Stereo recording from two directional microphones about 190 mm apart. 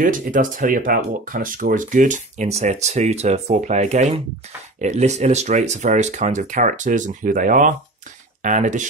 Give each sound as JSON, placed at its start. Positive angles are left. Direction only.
{"t": 0.0, "sound": "speech", "side_deg": -45}